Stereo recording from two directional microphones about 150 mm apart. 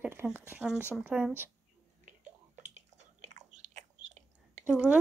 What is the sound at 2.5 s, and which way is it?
Biting, 50° right (ahead or behind).